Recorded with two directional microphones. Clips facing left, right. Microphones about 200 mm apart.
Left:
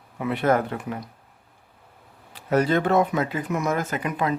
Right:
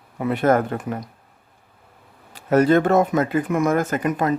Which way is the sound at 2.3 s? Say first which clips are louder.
Right 5 dB; 50° right (ahead or behind).